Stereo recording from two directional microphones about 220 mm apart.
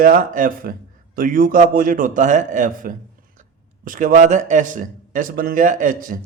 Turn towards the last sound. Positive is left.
turn(degrees=-40)  # may be behind; listen again after turning